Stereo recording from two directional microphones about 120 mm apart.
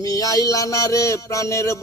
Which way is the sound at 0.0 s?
30° left (ahead or behind).